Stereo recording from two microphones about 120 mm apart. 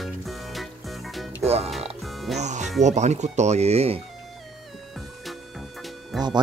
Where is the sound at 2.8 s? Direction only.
70° right (ahead or behind).